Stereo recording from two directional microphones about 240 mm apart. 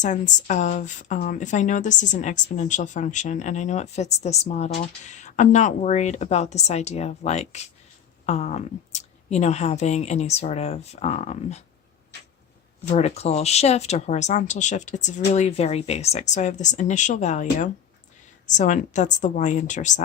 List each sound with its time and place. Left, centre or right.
0.0 s speech: left
12.9 s speech: left